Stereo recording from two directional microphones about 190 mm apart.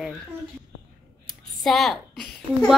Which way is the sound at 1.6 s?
Centre (ahead or behind).